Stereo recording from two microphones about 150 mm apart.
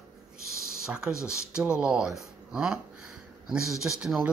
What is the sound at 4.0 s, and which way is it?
Speech, 5° right (ahead or behind).